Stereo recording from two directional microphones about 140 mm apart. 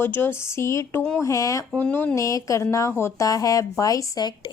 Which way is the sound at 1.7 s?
10° left (ahead or behind).